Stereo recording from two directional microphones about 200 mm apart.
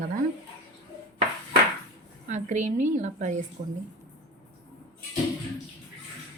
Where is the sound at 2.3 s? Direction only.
35° right (ahead or behind).